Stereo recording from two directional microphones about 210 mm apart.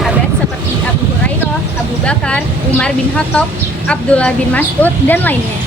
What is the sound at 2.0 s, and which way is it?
A woman's voice, 5° left (ahead or behind).